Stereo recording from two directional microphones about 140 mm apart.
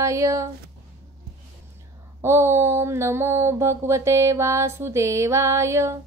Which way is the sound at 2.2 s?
20° right (ahead or behind).